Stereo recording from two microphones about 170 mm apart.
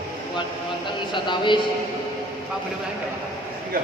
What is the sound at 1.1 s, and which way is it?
Speech, 30° left (ahead or behind).